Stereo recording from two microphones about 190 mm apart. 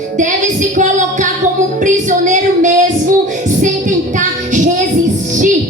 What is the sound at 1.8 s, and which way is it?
Speech, 40° right (ahead or behind).